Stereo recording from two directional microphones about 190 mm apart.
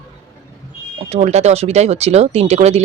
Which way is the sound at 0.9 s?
35° right (ahead or behind).